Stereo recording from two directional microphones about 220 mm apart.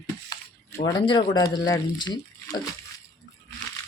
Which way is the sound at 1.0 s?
20° left (ahead or behind).